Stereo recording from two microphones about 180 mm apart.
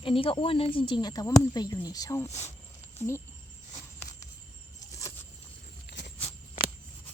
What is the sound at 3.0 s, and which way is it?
Speech, 15° left (ahead or behind).